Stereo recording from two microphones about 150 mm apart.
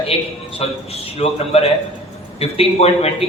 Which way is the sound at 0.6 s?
45° left (ahead or behind).